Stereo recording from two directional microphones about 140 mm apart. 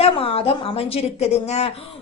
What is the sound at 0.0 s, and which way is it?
A woman's voice, 45° left (ahead or behind).